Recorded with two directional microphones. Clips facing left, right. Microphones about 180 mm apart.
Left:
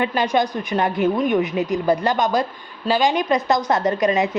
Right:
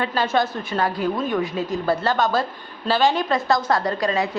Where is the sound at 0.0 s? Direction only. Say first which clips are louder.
Left 2 dB; 15° left (ahead or behind).